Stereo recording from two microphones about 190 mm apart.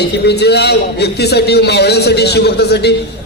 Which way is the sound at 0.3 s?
60° left (ahead or behind).